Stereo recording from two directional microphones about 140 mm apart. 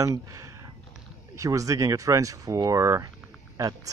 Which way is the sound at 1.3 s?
25° right (ahead or behind).